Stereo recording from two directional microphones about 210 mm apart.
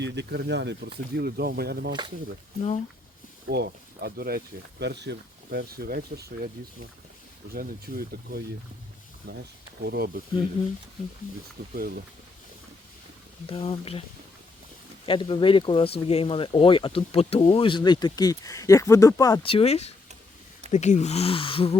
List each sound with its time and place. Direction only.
0.0 s speech: 55° right (ahead or behind)
1.9 s speech: 20° right (ahead or behind)
3.4 s speech: 50° right (ahead or behind)
7.5 s speech: 45° right (ahead or behind)
11.7 s speech: 45° right (ahead or behind)
13.5 s speech: 25° left (ahead or behind)
15.0 s speech: 25° left (ahead or behind)